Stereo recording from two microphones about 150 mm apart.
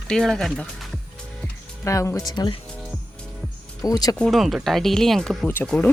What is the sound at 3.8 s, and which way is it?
Speech, 25° left (ahead or behind).